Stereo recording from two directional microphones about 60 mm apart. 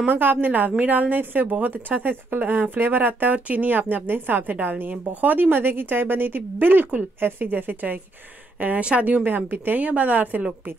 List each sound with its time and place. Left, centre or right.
0.0 s a woman's voice: right